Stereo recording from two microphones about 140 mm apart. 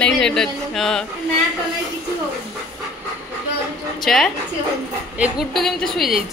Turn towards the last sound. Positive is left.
turn(degrees=0)  # may be behind; listen again after turning